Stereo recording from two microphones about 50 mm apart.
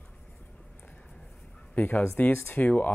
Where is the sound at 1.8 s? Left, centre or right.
Left.